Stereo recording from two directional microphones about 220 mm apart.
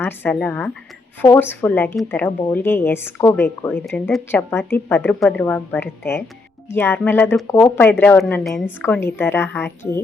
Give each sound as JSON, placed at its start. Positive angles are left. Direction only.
{"t": 0.0, "sound": "speech", "side_deg": 10}